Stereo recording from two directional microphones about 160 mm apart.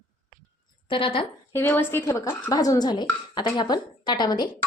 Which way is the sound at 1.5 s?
15° left (ahead or behind).